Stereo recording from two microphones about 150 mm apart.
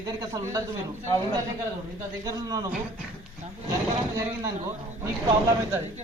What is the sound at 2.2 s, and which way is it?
Speech, 25° right (ahead or behind).